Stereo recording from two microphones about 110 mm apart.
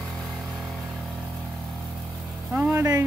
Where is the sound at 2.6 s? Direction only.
20° right (ahead or behind).